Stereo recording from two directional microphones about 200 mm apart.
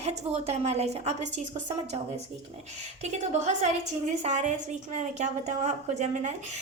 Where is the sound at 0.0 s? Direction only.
30° right (ahead or behind).